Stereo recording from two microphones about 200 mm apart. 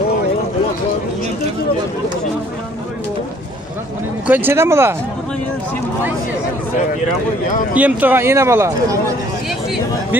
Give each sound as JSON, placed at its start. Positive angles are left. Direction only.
{"t": 4.3, "sound": "speech", "side_deg": -10}
{"t": 7.7, "sound": "speech", "side_deg": -10}